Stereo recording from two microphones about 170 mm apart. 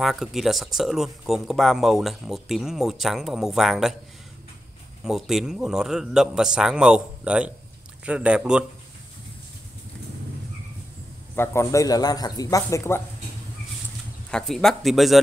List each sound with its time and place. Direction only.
0.0 s speech: centre (ahead or behind)
5.0 s speech: centre (ahead or behind)
11.3 s a man's voice: 15° left (ahead or behind)
14.3 s speech: centre (ahead or behind)